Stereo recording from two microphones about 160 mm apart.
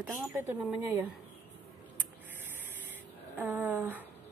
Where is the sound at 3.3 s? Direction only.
10° right (ahead or behind).